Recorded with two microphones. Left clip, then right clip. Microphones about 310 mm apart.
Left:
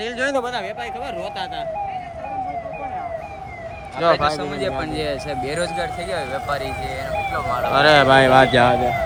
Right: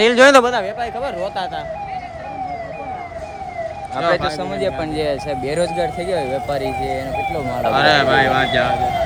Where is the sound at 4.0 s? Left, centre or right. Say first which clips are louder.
Left 1 dB; centre.